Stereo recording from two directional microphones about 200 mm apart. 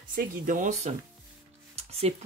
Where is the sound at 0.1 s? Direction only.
45° right (ahead or behind).